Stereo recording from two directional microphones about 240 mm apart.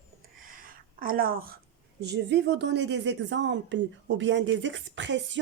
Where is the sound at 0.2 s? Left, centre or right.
Right.